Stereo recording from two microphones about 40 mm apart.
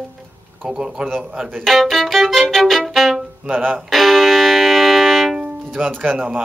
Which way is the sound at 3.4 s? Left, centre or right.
Right.